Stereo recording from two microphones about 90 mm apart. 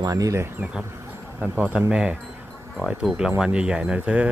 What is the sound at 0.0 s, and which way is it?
Speech, 40° right (ahead or behind).